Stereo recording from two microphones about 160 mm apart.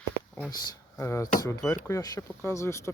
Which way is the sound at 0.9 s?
15° left (ahead or behind).